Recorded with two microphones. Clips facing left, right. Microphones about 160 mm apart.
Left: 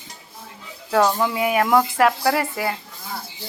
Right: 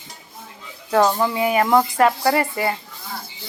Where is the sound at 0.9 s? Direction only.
Centre (ahead or behind).